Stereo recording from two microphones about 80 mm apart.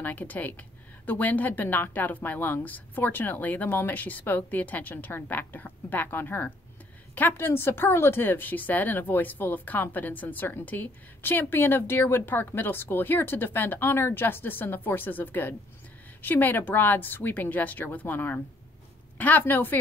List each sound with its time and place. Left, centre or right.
0.0 s speech: left